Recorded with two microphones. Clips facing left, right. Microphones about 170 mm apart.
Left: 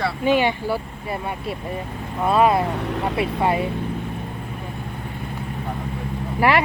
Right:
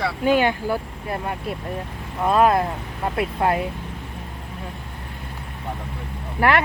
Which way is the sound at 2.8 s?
80° left.